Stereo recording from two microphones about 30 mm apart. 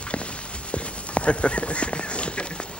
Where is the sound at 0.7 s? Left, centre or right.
Left.